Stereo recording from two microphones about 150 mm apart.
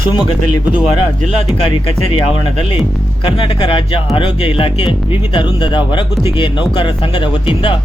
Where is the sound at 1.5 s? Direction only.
40° left (ahead or behind).